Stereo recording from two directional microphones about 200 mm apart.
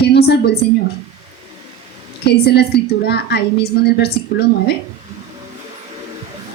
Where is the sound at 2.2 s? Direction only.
55° left (ahead or behind).